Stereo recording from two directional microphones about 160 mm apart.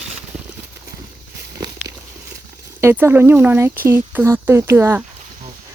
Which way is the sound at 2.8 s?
15° right (ahead or behind).